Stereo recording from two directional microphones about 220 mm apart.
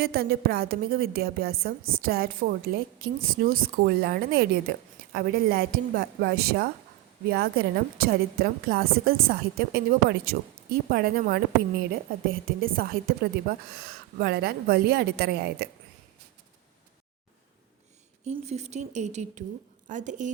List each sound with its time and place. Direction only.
0.0 s a woman's voice: 45° right (ahead or behind)
18.3 s a woman's voice: 30° right (ahead or behind)